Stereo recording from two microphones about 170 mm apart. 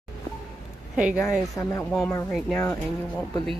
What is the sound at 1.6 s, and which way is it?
Speech, 15° left (ahead or behind).